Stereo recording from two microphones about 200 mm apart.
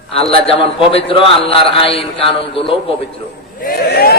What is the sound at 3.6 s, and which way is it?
Speech, 50° left (ahead or behind).